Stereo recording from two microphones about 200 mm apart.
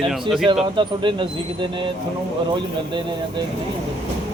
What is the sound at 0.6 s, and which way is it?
Speech, 25° right (ahead or behind).